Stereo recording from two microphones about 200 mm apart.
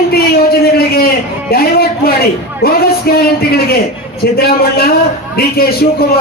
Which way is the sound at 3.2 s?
50° left (ahead or behind).